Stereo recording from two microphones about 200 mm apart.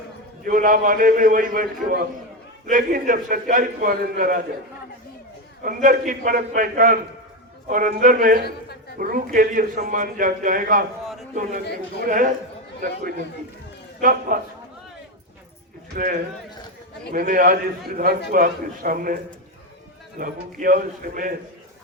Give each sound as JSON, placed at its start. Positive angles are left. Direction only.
{"t": 0.4, "sound": "a man's voice", "side_deg": -45}
{"t": 5.6, "sound": "a man's voice", "side_deg": -45}
{"t": 11.0, "sound": "a sound", "side_deg": 0}
{"t": 12.0, "sound": "a man's voice", "side_deg": -40}
{"t": 15.9, "sound": "a man's voice", "side_deg": -45}